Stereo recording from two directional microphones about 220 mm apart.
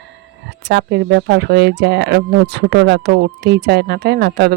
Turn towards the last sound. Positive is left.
turn(degrees=-50)  # may be behind; listen again after turning